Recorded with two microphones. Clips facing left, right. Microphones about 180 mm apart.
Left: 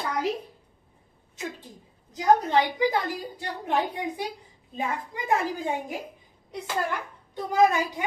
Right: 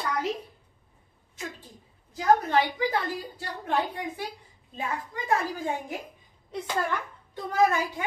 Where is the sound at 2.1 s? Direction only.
20° left (ahead or behind).